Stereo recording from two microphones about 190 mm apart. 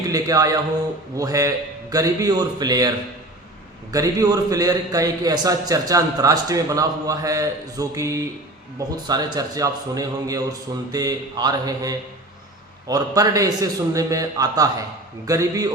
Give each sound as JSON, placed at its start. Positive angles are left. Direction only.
{"t": 0.1, "sound": "a man's voice", "side_deg": -20}
{"t": 3.9, "sound": "a man's voice", "side_deg": -20}